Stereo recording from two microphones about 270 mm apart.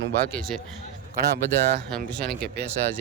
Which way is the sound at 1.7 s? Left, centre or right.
Right.